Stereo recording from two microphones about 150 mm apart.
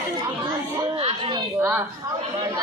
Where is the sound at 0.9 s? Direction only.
40° right (ahead or behind).